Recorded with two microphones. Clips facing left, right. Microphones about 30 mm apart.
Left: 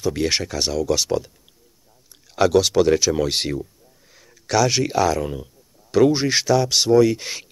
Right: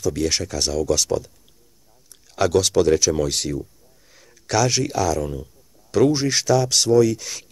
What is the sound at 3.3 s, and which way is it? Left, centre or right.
Speech, left.